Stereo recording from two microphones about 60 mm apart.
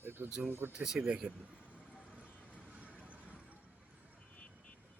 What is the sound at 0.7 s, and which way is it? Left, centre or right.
Speech, centre.